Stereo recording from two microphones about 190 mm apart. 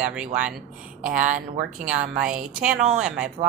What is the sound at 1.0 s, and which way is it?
Speech, 45° right (ahead or behind).